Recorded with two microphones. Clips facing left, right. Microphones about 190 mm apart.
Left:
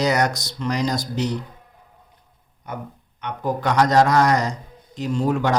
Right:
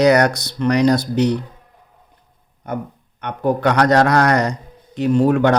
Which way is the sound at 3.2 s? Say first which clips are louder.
Right 6 dB; 60° right (ahead or behind).